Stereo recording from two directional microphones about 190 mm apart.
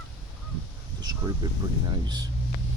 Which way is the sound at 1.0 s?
20° right (ahead or behind).